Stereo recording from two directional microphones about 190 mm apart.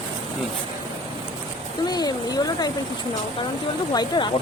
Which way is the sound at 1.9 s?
20° left (ahead or behind).